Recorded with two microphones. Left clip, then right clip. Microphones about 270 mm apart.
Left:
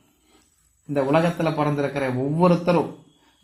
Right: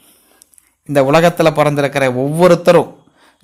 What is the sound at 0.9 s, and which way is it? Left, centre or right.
Speech, right.